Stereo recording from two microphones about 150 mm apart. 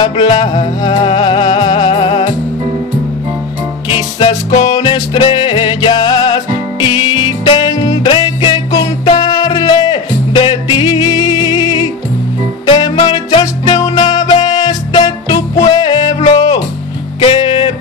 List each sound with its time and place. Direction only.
0.0 s music: 30° left (ahead or behind)
3.9 s music: 30° left (ahead or behind)
17.2 s music: 35° left (ahead or behind)